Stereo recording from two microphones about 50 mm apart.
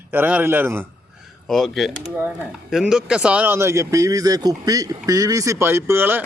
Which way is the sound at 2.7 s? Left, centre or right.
Centre.